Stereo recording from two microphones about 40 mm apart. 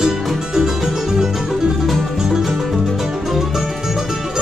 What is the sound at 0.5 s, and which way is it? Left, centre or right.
Music, centre.